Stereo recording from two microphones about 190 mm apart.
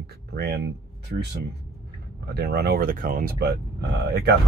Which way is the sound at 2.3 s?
60° right (ahead or behind).